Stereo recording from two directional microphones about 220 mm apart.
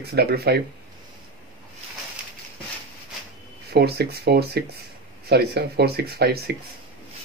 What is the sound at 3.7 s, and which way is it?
Speech, 45° right (ahead or behind).